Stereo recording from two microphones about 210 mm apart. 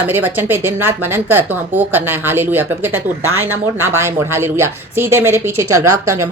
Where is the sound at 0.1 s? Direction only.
10° right (ahead or behind).